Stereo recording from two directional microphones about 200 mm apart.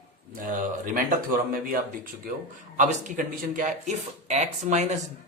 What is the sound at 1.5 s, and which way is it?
A man's voice, 45° right (ahead or behind).